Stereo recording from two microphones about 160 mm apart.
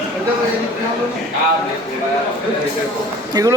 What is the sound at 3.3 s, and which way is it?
Speech, 20° right (ahead or behind).